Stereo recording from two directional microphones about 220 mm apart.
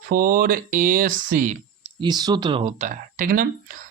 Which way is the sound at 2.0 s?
20° right (ahead or behind).